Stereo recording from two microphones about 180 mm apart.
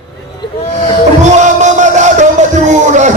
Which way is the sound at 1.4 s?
40° right (ahead or behind).